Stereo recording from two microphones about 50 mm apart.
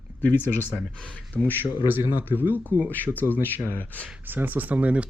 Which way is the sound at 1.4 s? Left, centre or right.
Centre.